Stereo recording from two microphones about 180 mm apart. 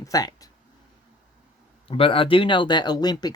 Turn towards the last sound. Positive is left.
turn(degrees=20)  # may be behind; listen again after turning